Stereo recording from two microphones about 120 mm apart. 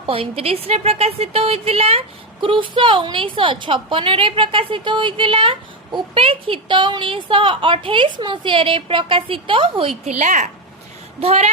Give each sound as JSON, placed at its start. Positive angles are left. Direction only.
{"t": 0.0, "sound": "a woman's voice", "side_deg": -50}
{"t": 10.0, "sound": "a woman's voice", "side_deg": -70}
{"t": 11.2, "sound": "speech", "side_deg": -60}